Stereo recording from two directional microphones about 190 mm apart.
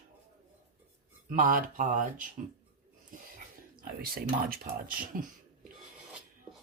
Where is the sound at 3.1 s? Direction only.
45° right (ahead or behind).